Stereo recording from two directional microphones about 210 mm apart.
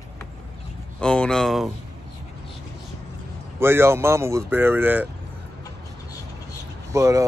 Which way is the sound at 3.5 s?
10° right (ahead or behind).